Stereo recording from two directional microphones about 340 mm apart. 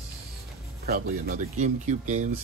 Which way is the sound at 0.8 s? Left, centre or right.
Right.